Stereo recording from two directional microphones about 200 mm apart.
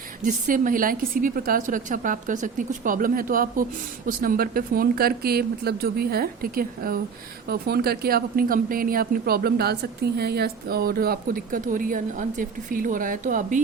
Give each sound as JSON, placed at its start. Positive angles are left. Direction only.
{"t": 0.3, "sound": "a woman's voice", "side_deg": -40}